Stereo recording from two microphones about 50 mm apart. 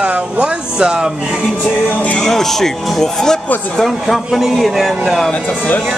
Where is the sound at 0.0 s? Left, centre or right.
Right.